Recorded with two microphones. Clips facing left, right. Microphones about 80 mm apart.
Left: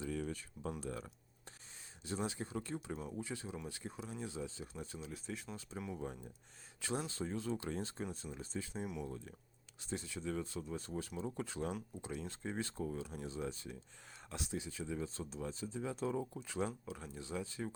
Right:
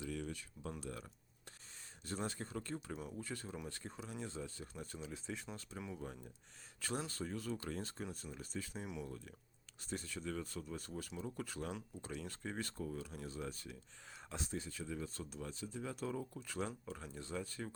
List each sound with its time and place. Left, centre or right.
0.0 s a sound: left
0.8 s speech: left
2.0 s speech: centre
4.4 s speech: centre
4.8 s speech: centre
5.7 s speech: left
7.1 s speech: left
14.3 s speech: centre